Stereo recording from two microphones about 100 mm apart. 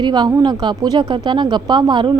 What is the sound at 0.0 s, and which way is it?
A woman's voice, 45° right (ahead or behind).